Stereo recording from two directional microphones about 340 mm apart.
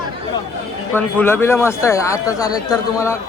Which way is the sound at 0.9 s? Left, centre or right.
Centre.